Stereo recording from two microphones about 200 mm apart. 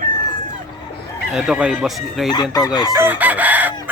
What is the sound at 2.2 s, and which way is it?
Chicken, 20° left (ahead or behind).